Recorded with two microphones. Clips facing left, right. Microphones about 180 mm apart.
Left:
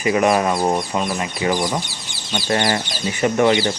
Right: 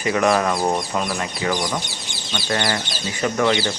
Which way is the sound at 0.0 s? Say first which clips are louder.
Left 2 dB; 15° left (ahead or behind).